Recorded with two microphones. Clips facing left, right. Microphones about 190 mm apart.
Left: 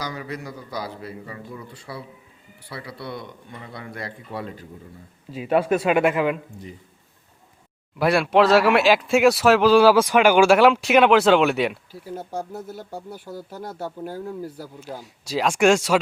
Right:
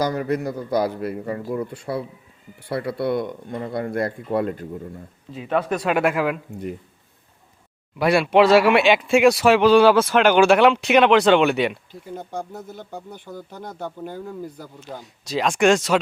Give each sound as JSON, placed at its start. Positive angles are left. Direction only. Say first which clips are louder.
{"t": 0.0, "sound": "speech", "louder": "right 9 dB", "side_deg": -50}
{"t": 5.3, "sound": "speech", "louder": "left 3 dB", "side_deg": 10}
{"t": 7.9, "sound": "speech", "louder": "right 2 dB", "side_deg": 0}